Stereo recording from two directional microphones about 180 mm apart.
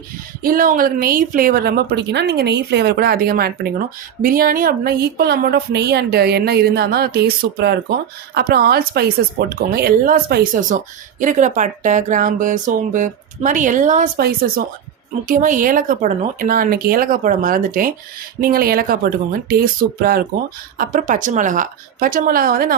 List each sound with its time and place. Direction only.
0.4 s a woman's voice: 50° right (ahead or behind)
14.2 s a woman's voice: 55° right (ahead or behind)